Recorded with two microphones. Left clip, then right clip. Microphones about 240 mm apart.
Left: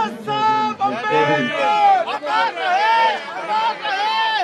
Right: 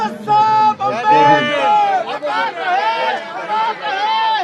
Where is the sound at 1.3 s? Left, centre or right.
Right.